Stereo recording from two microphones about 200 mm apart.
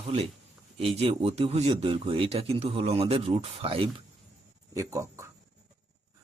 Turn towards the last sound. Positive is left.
turn(degrees=-15)  # may be behind; listen again after turning